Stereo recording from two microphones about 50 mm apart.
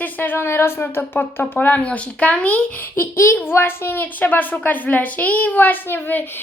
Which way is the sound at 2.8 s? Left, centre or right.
Left.